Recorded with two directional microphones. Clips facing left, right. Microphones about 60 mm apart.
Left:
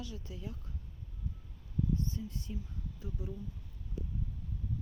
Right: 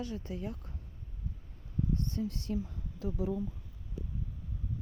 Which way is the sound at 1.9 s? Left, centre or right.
Right.